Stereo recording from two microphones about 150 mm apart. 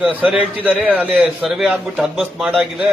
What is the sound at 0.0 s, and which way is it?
A man's voice, 5° right (ahead or behind).